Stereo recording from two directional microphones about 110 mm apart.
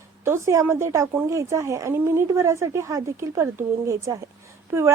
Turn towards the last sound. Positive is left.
turn(degrees=-25)  # may be behind; listen again after turning